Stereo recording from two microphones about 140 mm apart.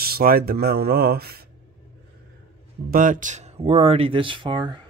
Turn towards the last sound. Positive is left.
turn(degrees=-35)  # may be behind; listen again after turning